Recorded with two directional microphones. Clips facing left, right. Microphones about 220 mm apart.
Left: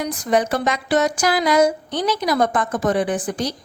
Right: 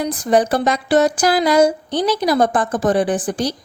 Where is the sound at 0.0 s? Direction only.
30° right (ahead or behind).